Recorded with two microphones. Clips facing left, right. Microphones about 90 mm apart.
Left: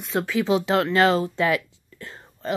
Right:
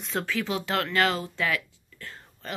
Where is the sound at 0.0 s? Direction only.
5° left (ahead or behind).